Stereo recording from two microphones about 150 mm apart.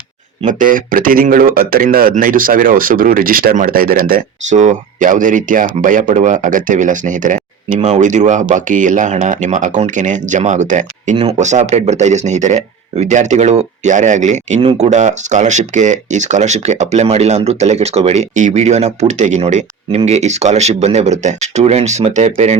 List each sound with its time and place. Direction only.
0.4 s speech: 65° right (ahead or behind)